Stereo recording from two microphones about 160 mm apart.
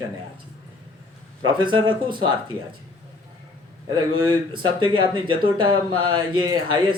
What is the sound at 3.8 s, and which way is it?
Speech, 30° right (ahead or behind).